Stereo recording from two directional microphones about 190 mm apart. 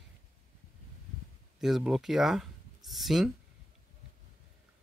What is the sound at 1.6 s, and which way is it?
Speech, centre (ahead or behind).